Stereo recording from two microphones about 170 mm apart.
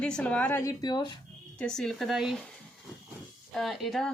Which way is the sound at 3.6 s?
Centre (ahead or behind).